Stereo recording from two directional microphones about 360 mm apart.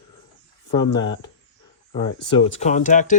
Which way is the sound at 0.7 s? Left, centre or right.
Centre.